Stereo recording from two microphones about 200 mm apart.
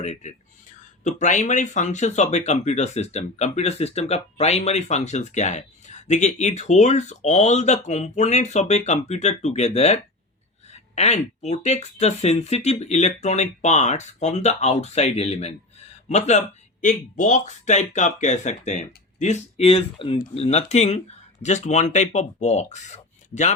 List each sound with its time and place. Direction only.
0.0 s speech: 35° left (ahead or behind)